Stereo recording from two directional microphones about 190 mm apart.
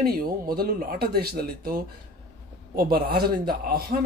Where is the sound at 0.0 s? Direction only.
55° right (ahead or behind).